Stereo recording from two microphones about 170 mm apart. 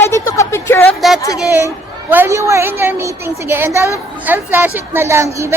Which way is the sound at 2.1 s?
15° right (ahead or behind).